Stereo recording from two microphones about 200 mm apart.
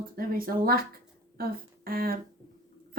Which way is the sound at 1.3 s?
45° right (ahead or behind).